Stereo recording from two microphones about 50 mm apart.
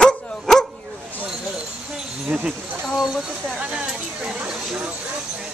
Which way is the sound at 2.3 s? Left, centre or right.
Right.